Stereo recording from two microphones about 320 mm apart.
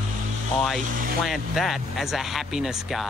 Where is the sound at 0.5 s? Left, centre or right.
Centre.